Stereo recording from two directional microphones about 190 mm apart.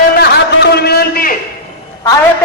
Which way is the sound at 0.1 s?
55° left (ahead or behind).